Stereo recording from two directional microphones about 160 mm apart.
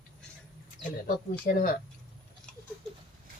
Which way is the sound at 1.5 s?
60° left (ahead or behind).